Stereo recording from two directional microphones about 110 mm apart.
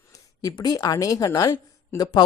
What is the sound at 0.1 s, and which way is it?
A woman's voice, 35° left (ahead or behind).